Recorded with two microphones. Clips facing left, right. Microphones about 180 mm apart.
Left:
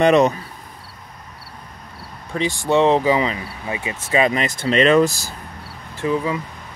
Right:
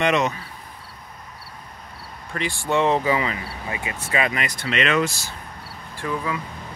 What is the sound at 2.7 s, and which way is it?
Speech, 20° left (ahead or behind).